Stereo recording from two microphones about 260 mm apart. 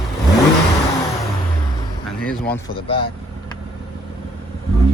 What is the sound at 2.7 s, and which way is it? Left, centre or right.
Speech, centre.